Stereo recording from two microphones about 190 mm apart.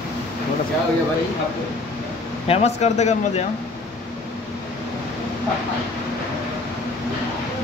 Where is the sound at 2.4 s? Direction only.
35° left (ahead or behind).